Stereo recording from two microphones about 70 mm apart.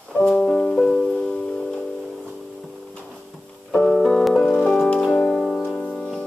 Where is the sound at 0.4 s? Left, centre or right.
Centre.